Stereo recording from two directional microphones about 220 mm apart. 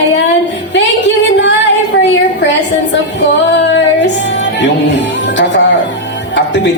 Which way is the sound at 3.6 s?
55° left (ahead or behind).